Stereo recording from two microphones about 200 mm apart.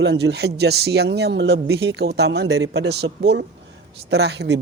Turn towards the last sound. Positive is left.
turn(degrees=-60)  # may be behind; listen again after turning